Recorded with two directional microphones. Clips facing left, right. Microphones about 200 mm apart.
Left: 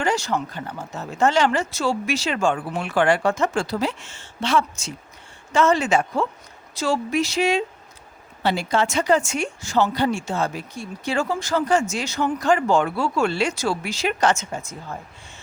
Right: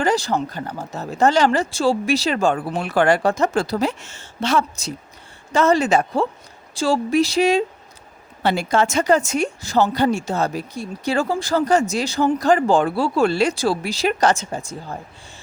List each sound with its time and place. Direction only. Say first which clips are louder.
0.0 s speech: right 3 dB; 35° right (ahead or behind)
8.4 s speech: right 3 dB; 50° right (ahead or behind); by 14.9 s 30° right (ahead or behind)